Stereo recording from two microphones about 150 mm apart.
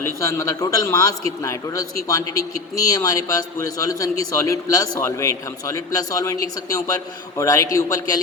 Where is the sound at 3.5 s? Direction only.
20° left (ahead or behind).